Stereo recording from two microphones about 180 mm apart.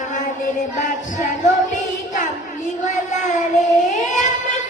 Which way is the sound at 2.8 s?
45° left (ahead or behind).